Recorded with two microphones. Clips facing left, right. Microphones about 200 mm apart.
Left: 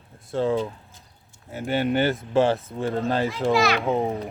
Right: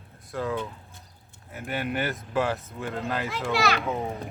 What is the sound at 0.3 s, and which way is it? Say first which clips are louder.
A child's voice: left 7 dB; 30° left (ahead or behind).